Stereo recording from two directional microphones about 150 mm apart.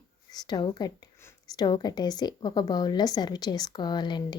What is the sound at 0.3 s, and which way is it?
A woman's voice, 30° left (ahead or behind).